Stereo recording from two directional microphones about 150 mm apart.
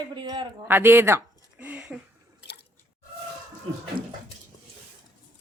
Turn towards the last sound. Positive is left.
turn(degrees=-35)  # may be behind; listen again after turning